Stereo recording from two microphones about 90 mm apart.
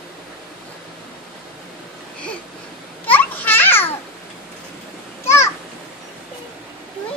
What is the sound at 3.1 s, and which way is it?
Children playing, 20° left (ahead or behind).